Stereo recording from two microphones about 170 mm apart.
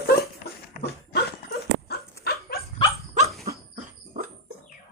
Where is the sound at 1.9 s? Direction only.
65° left (ahead or behind).